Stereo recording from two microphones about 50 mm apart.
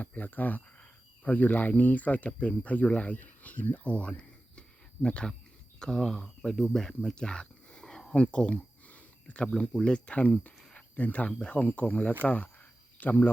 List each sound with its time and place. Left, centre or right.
0.0 s speech: left
3.8 s a sound: left
5.0 s speech: centre; by 13.3 s left